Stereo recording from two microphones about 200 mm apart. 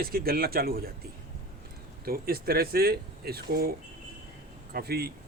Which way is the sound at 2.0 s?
50° right (ahead or behind).